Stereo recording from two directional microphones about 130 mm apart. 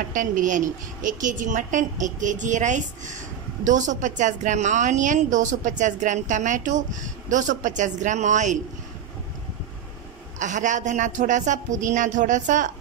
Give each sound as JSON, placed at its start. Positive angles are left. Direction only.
{"t": 0.1, "sound": "a woman's voice", "side_deg": -90}
{"t": 10.4, "sound": "a woman's voice", "side_deg": -70}